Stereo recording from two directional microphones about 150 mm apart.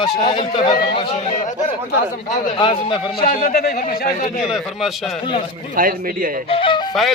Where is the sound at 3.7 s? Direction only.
55° left (ahead or behind).